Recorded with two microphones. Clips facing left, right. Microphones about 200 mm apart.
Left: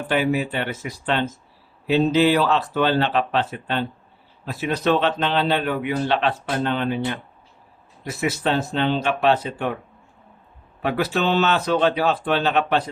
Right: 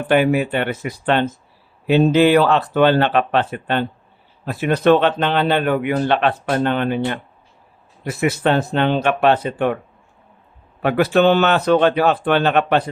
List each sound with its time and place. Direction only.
0.1 s a man's voice: 60° right (ahead or behind)
8.2 s a man's voice: 55° right (ahead or behind)
10.8 s a man's voice: 60° right (ahead or behind)